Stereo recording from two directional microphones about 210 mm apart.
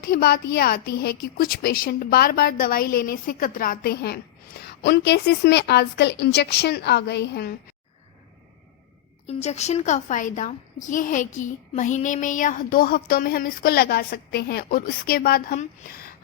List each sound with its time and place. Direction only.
0.0 s a woman's voice: 45° left (ahead or behind)
9.2 s a woman's voice: 30° left (ahead or behind)